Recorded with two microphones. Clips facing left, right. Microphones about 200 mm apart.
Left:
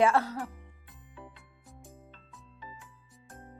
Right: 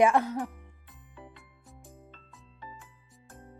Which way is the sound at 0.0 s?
15° right (ahead or behind).